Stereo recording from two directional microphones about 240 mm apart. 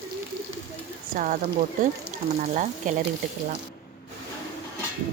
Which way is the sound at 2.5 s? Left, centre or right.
Right.